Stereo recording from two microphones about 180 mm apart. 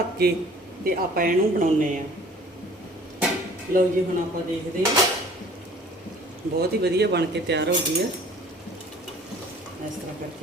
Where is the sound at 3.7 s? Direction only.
50° right (ahead or behind).